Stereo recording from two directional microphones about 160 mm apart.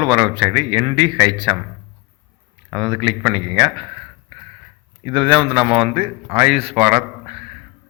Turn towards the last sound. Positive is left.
turn(degrees=-40)  # may be behind; listen again after turning